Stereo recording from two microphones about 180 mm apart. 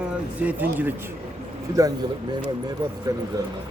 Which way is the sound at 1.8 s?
20° right (ahead or behind).